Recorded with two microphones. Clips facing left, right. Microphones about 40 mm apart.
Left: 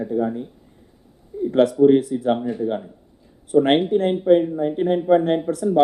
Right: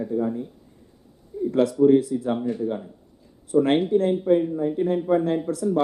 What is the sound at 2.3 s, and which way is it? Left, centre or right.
Speech, left.